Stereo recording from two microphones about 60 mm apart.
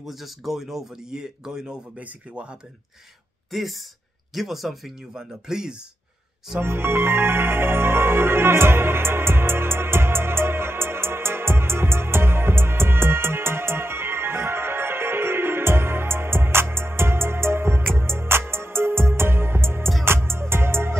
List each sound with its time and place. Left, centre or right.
0.0 s speech: centre
3.5 s speech: centre
6.6 s music: right